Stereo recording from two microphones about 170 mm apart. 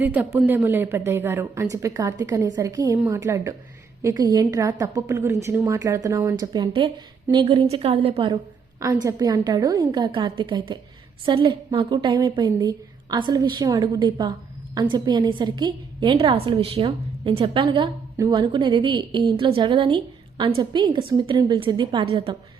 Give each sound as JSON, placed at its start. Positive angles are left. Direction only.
{"t": 0.0, "sound": "a woman's voice", "side_deg": -10}
{"t": 8.8, "sound": "a woman's voice", "side_deg": -20}